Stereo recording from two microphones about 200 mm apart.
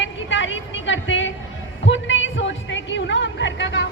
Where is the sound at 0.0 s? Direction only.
70° left (ahead or behind).